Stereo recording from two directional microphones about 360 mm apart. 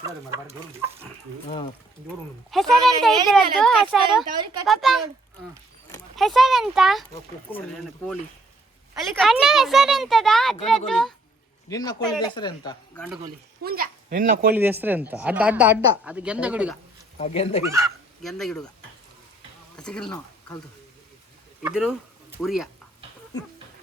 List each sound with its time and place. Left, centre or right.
0.0 s chicken: centre
1.5 s speech: centre
2.5 s speech: centre
9.0 s speech: centre
13.2 s speech: right
14.5 s speech: centre
17.2 s speech: centre
17.7 s speech: centre
19.7 s speech: centre
21.6 s speech: centre